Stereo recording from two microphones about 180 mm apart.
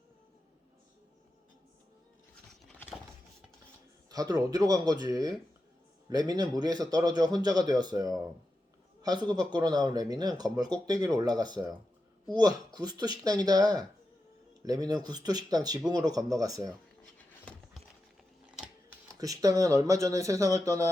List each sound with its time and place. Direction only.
2.6 s vehicle: 5° left (ahead or behind)
4.1 s speech: 20° right (ahead or behind)
17.2 s a sound: 5° left (ahead or behind)
19.2 s speech: 20° right (ahead or behind)